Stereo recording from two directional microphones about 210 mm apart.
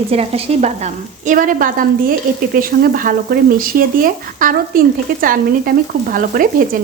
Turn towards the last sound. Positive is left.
turn(degrees=-40)  # may be behind; listen again after turning